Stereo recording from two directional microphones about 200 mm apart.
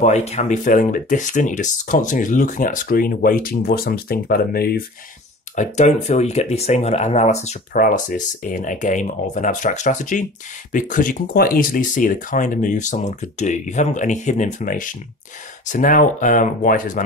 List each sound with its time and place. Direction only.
0.0 s speech: 30° left (ahead or behind); by 4.8 s 50° left (ahead or behind)
5.6 s speech: 35° left (ahead or behind)